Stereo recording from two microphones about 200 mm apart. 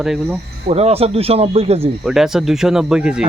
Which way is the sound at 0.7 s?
30° right (ahead or behind).